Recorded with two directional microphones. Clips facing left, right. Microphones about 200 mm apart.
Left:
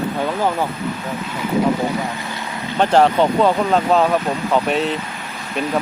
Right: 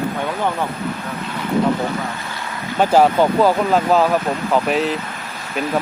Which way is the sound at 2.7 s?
5° right (ahead or behind).